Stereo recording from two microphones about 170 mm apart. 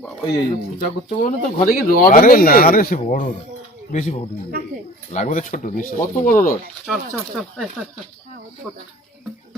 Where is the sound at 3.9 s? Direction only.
45° left (ahead or behind).